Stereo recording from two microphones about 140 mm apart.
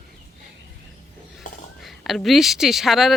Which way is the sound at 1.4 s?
70° left (ahead or behind).